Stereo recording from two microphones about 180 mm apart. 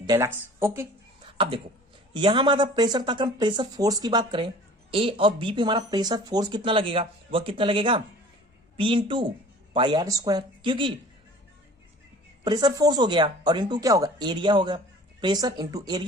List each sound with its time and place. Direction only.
0.0 s speech: 20° right (ahead or behind)
1.4 s speech: 30° right (ahead or behind)
12.5 s speech: 20° right (ahead or behind)